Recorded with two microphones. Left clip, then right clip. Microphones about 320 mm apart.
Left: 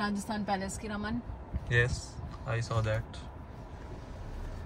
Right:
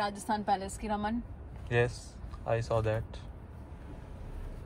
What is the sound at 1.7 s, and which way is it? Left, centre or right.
Speech, centre.